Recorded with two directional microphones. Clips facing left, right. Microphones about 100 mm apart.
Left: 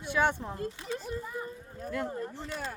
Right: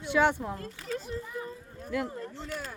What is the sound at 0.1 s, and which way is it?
Speech, 15° right (ahead or behind).